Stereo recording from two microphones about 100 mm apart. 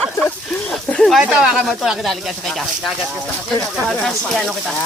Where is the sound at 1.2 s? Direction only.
10° right (ahead or behind).